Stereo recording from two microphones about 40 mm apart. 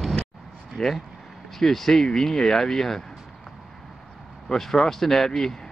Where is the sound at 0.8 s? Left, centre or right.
Centre.